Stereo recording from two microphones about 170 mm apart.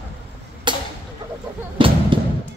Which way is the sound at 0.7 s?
25° right (ahead or behind).